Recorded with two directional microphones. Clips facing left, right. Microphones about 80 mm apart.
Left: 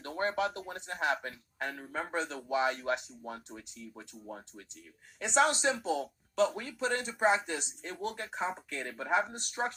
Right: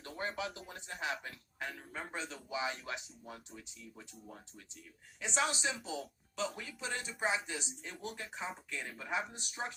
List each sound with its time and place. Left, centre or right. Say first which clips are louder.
0.0 s speech: left 8 dB; left